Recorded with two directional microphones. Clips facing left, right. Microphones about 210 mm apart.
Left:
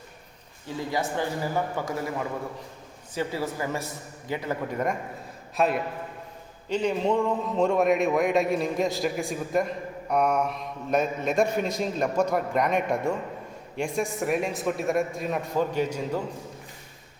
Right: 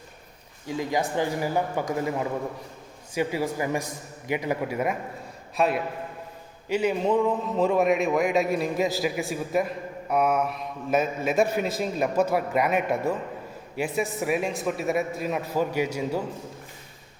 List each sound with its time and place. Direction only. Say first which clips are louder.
0.7 s a man's voice: right 2 dB; 15° right (ahead or behind)